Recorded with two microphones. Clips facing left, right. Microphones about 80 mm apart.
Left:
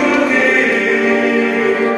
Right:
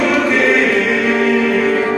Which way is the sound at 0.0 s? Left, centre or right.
Centre.